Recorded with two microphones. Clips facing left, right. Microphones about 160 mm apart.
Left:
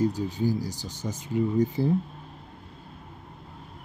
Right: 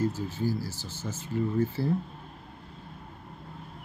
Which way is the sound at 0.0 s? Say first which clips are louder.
Left 4 dB; 15° left (ahead or behind).